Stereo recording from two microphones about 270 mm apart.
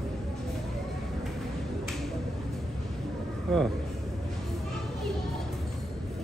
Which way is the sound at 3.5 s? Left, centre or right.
Centre.